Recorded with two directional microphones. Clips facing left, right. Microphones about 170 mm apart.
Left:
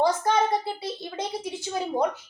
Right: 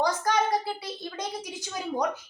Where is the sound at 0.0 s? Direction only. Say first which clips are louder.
Left 3 dB; 25° left (ahead or behind).